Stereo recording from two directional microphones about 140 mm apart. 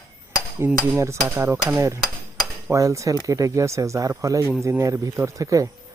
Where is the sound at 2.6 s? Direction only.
20° right (ahead or behind).